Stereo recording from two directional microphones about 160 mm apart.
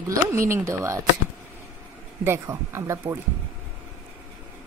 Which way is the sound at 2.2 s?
15° right (ahead or behind).